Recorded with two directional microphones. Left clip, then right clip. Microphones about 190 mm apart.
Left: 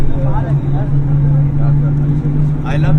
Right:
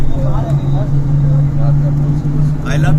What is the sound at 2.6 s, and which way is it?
Vehicle, 35° left (ahead or behind).